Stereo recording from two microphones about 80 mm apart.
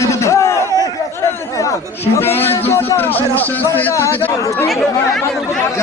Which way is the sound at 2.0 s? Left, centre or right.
Left.